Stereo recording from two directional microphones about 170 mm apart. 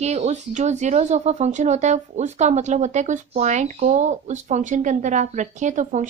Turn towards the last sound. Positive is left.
turn(degrees=-45)  # may be behind; listen again after turning